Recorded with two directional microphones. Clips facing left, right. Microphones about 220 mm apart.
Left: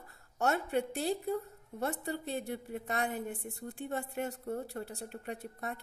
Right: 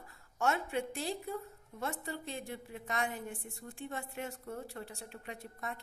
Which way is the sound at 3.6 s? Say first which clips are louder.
Left 5 dB; 40° left (ahead or behind).